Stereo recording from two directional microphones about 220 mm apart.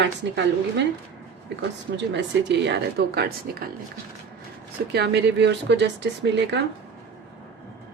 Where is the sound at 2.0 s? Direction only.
50° right (ahead or behind).